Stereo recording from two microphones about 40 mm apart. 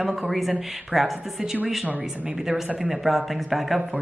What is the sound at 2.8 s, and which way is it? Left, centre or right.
Speech, centre.